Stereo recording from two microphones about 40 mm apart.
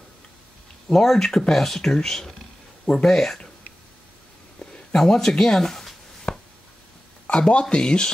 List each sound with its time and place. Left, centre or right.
0.8 s speech: centre
4.9 s speech: centre
6.3 s a sound: left
7.2 s speech: left